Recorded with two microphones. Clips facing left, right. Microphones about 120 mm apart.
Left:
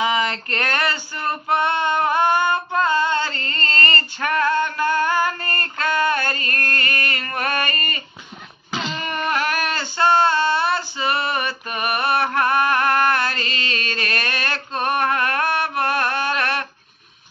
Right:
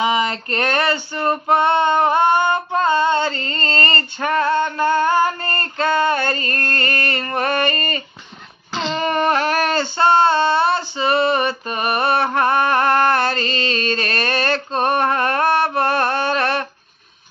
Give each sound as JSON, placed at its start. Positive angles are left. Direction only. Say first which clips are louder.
{"t": 0.0, "sound": "female singing", "louder": "right 2 dB", "side_deg": -25}
{"t": 8.7, "sound": "a sound", "louder": "right 4 dB", "side_deg": 5}
{"t": 9.0, "sound": "female singing", "louder": "right 6 dB", "side_deg": -30}